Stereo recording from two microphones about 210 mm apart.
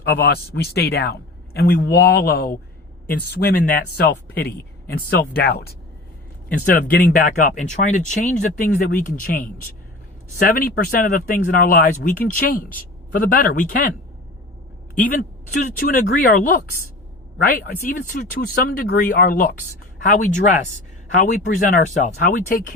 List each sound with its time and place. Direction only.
0.2 s speech: 50° left (ahead or behind)
14.9 s speech: 40° left (ahead or behind)